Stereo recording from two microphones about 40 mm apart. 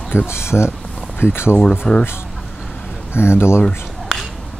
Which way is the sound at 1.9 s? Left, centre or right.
Centre.